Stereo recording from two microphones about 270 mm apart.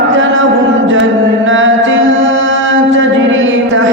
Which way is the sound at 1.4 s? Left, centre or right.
Right.